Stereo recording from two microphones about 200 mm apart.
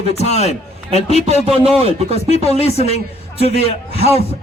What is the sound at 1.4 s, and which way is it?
Speech, 30° right (ahead or behind).